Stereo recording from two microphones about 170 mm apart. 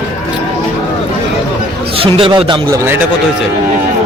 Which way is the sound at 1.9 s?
35° right (ahead or behind).